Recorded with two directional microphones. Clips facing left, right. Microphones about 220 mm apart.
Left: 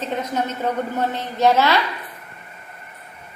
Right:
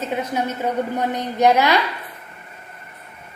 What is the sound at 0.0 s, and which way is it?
A woman's voice, 10° right (ahead or behind).